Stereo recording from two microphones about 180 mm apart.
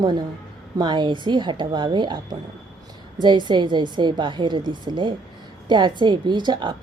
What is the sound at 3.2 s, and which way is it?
A woman's voice, 25° right (ahead or behind).